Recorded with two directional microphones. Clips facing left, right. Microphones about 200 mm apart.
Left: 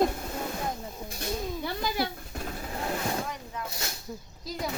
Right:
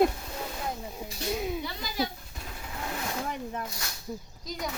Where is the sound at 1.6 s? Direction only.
60° left (ahead or behind).